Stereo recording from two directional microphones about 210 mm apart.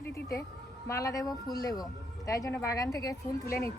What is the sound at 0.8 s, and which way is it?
Speech, 15° left (ahead or behind).